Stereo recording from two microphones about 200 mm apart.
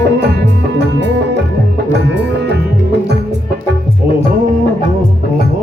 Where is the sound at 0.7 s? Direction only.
60° right (ahead or behind).